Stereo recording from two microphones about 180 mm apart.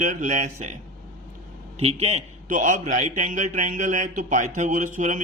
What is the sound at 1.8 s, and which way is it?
A man's voice, 35° right (ahead or behind).